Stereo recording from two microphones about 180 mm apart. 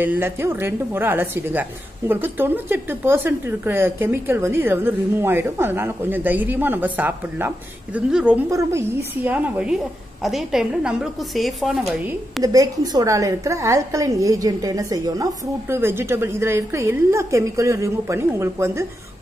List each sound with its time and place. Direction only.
0.0 s a woman's voice: 10° right (ahead or behind)
8.5 s a woman's voice: 15° right (ahead or behind)
12.5 s a woman's voice: 20° right (ahead or behind)